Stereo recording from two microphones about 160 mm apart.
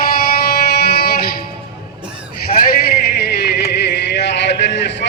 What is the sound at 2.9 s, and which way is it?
Music, 85° left.